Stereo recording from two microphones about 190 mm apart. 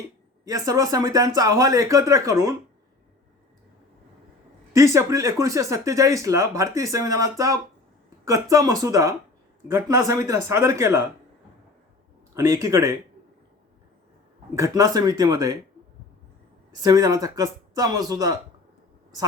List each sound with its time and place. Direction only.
0.4 s speech: 20° right (ahead or behind)
4.7 s speech: 15° right (ahead or behind)
12.3 s speech: 15° right (ahead or behind)
14.5 s speech: 15° right (ahead or behind)
16.8 s speech: 20° right (ahead or behind)